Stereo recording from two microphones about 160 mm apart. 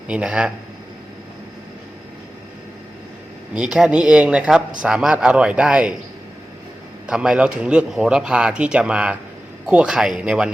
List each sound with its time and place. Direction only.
0.1 s speech: 5° right (ahead or behind)
3.5 s speech: 5° right (ahead or behind)
7.1 s speech: 5° right (ahead or behind)